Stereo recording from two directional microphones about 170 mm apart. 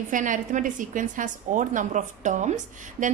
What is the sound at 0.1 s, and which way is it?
A woman's voice, 50° right (ahead or behind).